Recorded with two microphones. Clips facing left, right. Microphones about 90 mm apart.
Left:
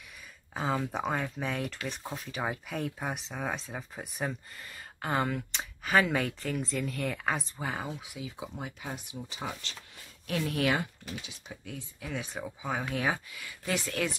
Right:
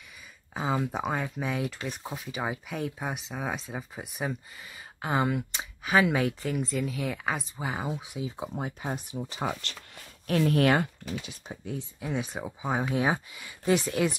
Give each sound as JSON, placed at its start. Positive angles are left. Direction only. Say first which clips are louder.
{"t": 0.6, "sound": "speech", "louder": "right 2 dB", "side_deg": -5}
{"t": 8.0, "sound": "speech", "louder": "right 5 dB", "side_deg": -25}
{"t": 9.2, "sound": "speech", "louder": "right 7 dB", "side_deg": -50}
{"t": 10.2, "sound": "speech", "louder": "right 6 dB", "side_deg": -45}
{"t": 11.6, "sound": "speech", "louder": "right 7 dB", "side_deg": -25}